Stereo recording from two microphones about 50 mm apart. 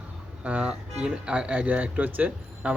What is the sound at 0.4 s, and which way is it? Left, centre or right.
Speech, right.